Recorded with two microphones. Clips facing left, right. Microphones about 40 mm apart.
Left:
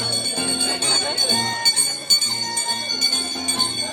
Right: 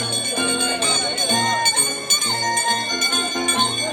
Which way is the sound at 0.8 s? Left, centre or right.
Right.